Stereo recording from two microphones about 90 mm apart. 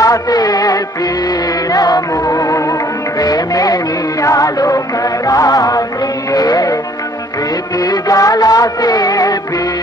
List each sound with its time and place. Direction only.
0.0 s music: 40° left (ahead or behind)
7.8 s music: 40° left (ahead or behind)